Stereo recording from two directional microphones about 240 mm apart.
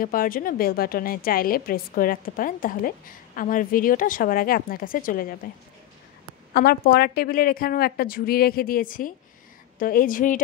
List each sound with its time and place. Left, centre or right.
0.0 s a woman's voice: left
6.5 s a woman's voice: left